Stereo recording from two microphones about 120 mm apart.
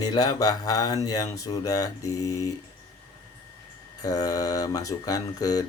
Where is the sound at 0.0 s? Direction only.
30° left (ahead or behind).